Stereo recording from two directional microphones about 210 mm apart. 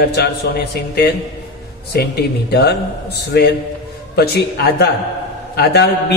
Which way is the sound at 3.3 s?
50° left (ahead or behind).